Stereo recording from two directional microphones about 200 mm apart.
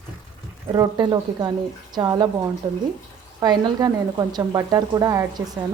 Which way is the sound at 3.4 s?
20° right (ahead or behind).